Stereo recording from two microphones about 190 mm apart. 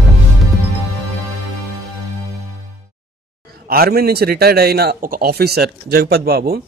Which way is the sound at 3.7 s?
55° right (ahead or behind).